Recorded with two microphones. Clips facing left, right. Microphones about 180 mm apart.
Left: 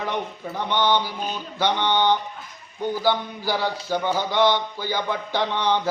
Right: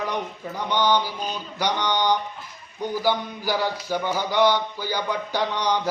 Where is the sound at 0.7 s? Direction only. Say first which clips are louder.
Even; 10° right (ahead or behind).